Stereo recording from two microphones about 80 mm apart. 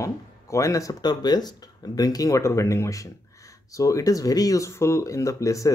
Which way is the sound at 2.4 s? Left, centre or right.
Left.